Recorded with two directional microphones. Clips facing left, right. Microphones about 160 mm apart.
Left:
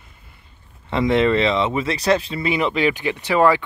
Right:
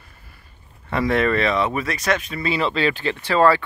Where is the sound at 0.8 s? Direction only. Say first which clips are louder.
Left 2 dB; 20° left (ahead or behind).